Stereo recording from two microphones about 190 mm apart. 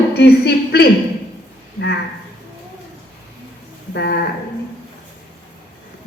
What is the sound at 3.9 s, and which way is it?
Speech, 60° left (ahead or behind).